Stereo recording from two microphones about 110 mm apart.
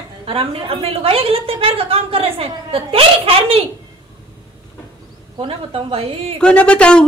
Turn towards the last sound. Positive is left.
turn(degrees=10)  # may be behind; listen again after turning